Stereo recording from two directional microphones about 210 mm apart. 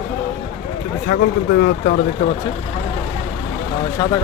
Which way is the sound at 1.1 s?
50° left (ahead or behind).